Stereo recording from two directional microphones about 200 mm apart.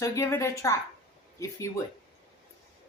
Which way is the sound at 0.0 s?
15° left (ahead or behind).